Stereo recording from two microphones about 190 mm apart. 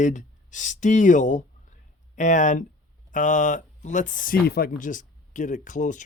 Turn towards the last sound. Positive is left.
turn(degrees=40)  # may be behind; listen again after turning